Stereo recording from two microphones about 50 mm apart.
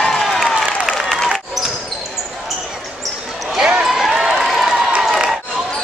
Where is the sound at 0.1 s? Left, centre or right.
Centre.